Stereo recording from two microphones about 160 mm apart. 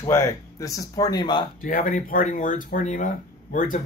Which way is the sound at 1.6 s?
60° left (ahead or behind).